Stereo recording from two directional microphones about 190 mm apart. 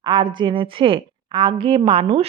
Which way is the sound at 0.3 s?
25° right (ahead or behind).